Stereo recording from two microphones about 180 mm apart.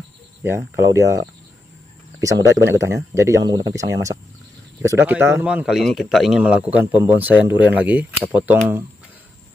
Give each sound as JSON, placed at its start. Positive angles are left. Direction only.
{"t": 0.4, "sound": "a man's voice", "side_deg": -15}